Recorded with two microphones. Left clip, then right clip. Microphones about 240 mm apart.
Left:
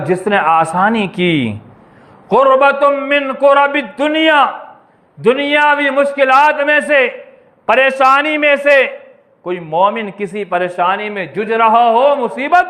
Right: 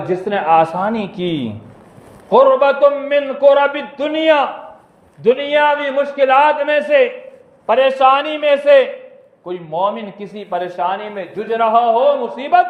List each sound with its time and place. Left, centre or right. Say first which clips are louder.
0.0 s a man's voice: left 5 dB; left